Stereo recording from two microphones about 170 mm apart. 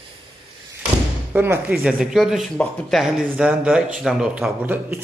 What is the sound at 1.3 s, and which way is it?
Speech, 15° right (ahead or behind).